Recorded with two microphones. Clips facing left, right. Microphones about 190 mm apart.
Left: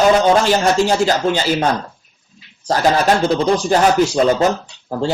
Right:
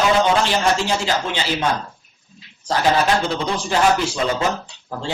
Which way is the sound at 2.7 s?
40° left (ahead or behind).